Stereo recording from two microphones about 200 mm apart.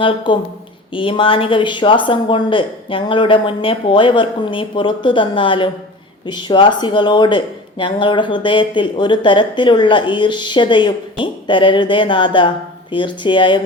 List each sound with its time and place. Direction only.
0.3 s speech: 25° left (ahead or behind)